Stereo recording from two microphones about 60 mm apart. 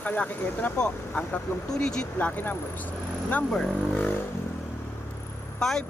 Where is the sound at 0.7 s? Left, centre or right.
Centre.